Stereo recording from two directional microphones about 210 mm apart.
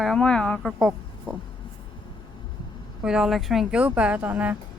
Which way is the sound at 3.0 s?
5° right (ahead or behind).